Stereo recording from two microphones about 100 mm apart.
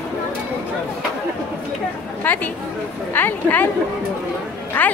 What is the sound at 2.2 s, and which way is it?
Chatter, 20° left (ahead or behind).